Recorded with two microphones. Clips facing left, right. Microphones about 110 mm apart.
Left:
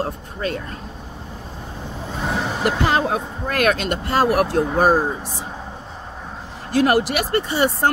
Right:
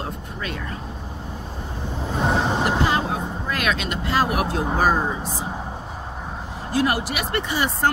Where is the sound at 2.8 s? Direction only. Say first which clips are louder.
Left 3 dB; 65° left (ahead or behind).